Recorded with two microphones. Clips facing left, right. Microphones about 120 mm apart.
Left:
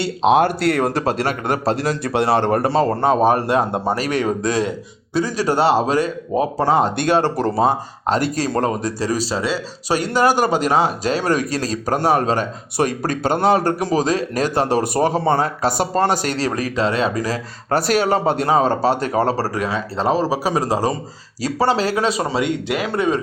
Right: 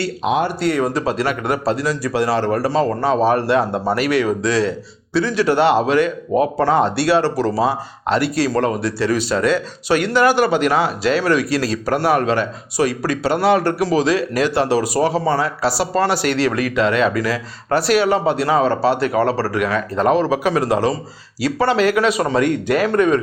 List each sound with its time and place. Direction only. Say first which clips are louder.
0.0 s speech: left 4 dB; 25° left (ahead or behind)
0.4 s speech: left 1 dB; 65° left (ahead or behind)
3.2 s speech: right 1 dB; 45° left (ahead or behind)
3.6 s speech: right 1 dB; 20° left (ahead or behind)
3.9 s speech: right 3 dB; 40° left (ahead or behind)
6.8 s speech: right 1 dB; 45° left (ahead or behind)
12.7 s speech: right 1 dB; 50° left (ahead or behind); by 23.2 s 25° left (ahead or behind)